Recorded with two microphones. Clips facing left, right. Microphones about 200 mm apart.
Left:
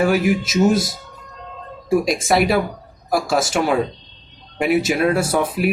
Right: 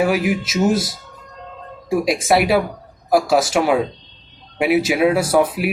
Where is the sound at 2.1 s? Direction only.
5° right (ahead or behind).